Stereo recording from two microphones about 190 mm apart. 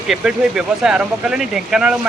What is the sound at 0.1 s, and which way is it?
Speech, 5° right (ahead or behind).